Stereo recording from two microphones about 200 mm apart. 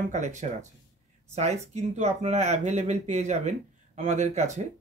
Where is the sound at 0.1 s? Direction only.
35° right (ahead or behind).